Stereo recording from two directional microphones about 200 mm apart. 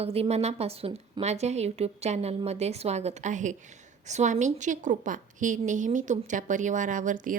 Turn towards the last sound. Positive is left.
turn(degrees=-40)  # may be behind; listen again after turning